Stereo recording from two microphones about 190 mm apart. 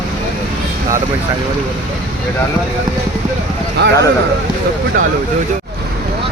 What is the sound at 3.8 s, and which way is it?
Speech, 60° right (ahead or behind).